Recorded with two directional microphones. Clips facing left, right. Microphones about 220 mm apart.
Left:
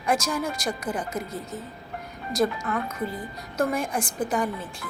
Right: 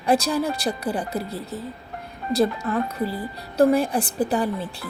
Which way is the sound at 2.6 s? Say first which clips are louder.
Right 4 dB; 35° right (ahead or behind).